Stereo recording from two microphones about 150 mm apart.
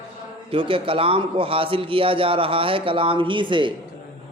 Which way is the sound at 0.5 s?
35° right (ahead or behind).